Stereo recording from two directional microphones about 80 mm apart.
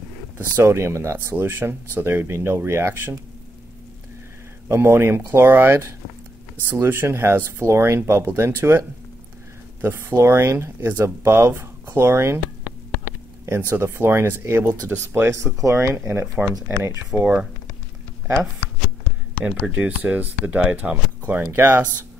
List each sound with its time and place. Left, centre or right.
0.7 s speech: right
4.6 s speech: right
13.5 s speech: right
17.1 s speech: centre
18.2 s a sound: centre
19.6 s speech: centre